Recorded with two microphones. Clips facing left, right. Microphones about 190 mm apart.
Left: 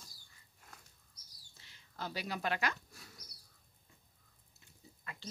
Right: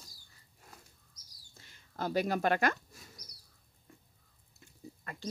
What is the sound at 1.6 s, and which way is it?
Speech, 50° right (ahead or behind).